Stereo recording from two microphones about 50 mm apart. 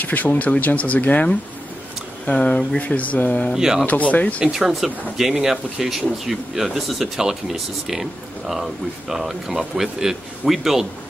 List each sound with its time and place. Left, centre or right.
0.0 s speech: left
3.5 s speech: centre
3.8 s speech: left
4.4 s speech: centre